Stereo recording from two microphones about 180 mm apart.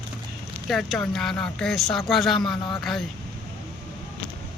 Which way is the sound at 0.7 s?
Centre (ahead or behind).